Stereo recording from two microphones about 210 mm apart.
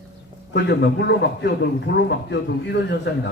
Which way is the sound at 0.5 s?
55° left (ahead or behind).